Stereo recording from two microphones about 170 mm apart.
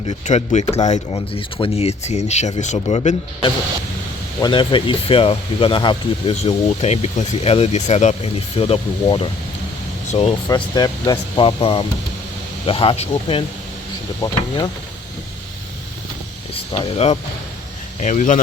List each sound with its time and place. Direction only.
0.0 s speech: 35° left (ahead or behind)
4.4 s speech: 25° left (ahead or behind)
10.5 s speech: 25° left (ahead or behind)
14.2 s speech: 25° left (ahead or behind)
16.7 s speech: 40° left (ahead or behind)